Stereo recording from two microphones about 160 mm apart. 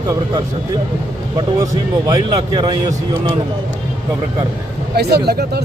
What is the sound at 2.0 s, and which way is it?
A man's voice, 25° right (ahead or behind).